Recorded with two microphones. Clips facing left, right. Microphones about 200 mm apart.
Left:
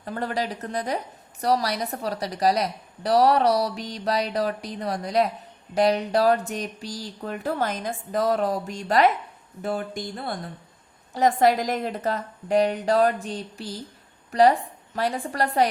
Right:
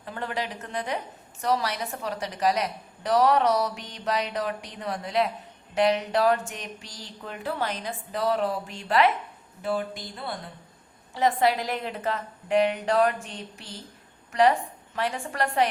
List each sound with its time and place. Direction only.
0.0 s a woman's voice: 40° left (ahead or behind)
9.6 s music: 45° left (ahead or behind)
11.1 s a woman's voice: 45° left (ahead or behind)